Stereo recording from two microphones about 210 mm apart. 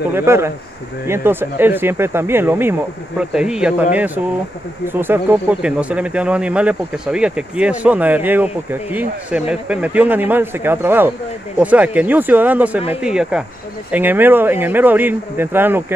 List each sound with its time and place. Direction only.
0.1 s a man's voice: 10° right (ahead or behind)